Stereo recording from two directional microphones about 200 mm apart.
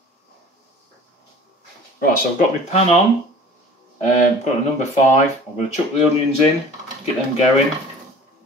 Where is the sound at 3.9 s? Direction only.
35° left (ahead or behind).